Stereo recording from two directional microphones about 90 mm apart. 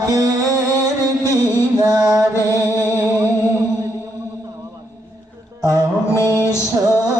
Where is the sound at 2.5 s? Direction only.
35° right (ahead or behind).